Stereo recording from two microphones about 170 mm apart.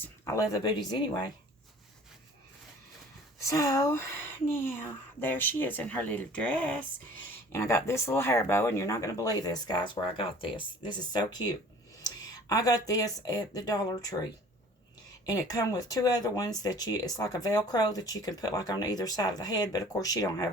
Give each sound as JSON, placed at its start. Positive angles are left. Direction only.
{"t": 0.0, "sound": "speech", "side_deg": 15}
{"t": 3.4, "sound": "speech", "side_deg": 20}
{"t": 15.3, "sound": "speech", "side_deg": 20}